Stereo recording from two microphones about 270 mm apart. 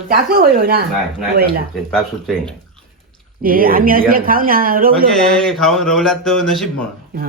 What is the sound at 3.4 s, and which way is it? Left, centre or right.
Speech, right.